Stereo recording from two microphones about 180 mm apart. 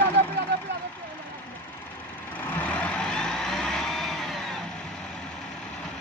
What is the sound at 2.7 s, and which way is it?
Vehicle, 5° left (ahead or behind).